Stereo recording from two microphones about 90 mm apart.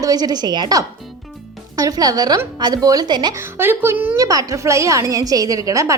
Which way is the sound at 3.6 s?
25° right (ahead or behind).